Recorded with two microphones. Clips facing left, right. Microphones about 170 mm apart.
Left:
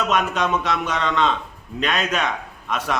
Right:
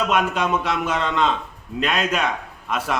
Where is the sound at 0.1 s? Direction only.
10° right (ahead or behind).